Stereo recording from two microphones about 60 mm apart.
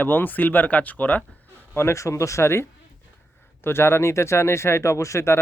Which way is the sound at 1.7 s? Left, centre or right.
Left.